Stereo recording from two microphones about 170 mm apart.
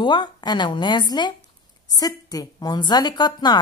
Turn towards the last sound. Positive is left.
turn(degrees=25)  # may be behind; listen again after turning